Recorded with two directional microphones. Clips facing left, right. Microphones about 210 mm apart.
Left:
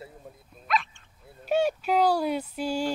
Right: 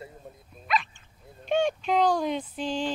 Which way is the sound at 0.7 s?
Centre (ahead or behind).